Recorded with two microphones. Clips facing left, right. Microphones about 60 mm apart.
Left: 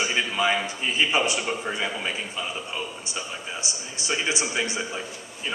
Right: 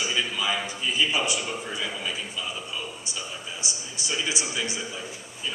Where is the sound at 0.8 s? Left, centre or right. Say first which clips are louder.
Left 2 dB; left.